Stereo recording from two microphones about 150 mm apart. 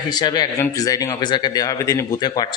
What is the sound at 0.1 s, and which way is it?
Speech, 25° left (ahead or behind).